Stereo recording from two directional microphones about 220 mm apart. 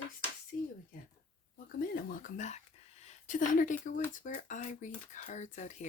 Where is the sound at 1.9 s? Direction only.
40° left (ahead or behind).